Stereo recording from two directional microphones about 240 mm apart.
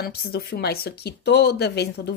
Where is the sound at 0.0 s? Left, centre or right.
Left.